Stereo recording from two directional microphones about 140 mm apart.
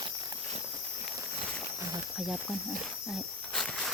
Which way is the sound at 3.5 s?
5° left (ahead or behind).